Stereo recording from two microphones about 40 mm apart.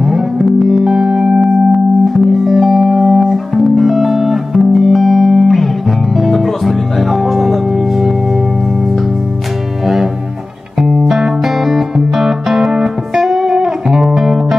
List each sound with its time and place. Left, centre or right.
0.5 s music: centre
0.9 s music: centre
1.4 s music: centre
11.1 s music: centre